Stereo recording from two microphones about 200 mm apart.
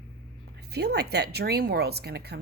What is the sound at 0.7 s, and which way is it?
Speech, 55° right (ahead or behind).